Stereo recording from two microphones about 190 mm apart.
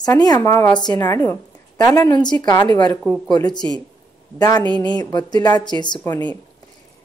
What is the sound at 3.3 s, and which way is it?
A woman's voice, 20° left (ahead or behind).